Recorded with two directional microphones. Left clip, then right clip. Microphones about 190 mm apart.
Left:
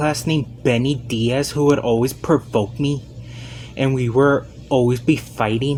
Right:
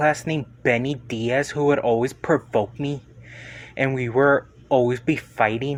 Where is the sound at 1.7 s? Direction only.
50° right (ahead or behind).